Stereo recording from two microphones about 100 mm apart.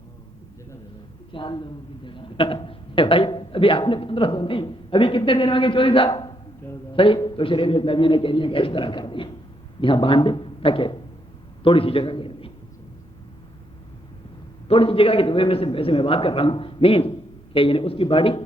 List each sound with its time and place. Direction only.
1.3 s a woman's voice: 55° left (ahead or behind)
6.1 s a man's voice: 45° left (ahead or behind)
6.9 s a man's voice: 60° left (ahead or behind)
14.7 s a woman's voice: 65° left (ahead or behind)